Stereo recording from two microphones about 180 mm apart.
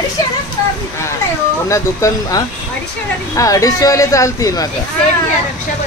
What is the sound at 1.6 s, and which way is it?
Speech, 15° left (ahead or behind).